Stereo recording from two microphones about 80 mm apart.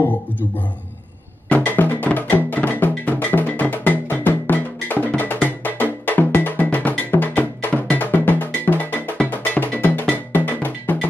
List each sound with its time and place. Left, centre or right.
1.5 s music: left
5.0 s cowbell: left